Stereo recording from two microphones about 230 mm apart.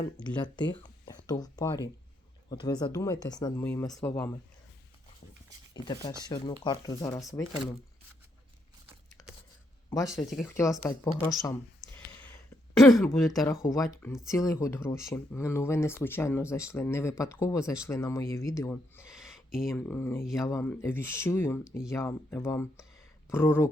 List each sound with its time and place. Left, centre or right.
0.3 s speech: centre
5.7 s speech: centre
9.2 s a sound: centre
9.9 s speech: centre
10.2 s speech: centre
10.8 s speech: centre
11.8 s a sound: centre
13.5 s speech: centre
19.0 s a sound: centre
19.7 s speech: centre